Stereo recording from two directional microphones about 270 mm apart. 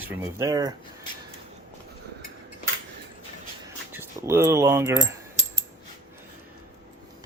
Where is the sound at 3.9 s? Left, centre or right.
Centre.